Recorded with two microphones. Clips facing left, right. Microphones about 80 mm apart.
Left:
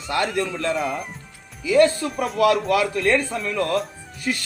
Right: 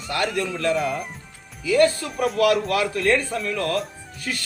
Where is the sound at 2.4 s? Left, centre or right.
Left.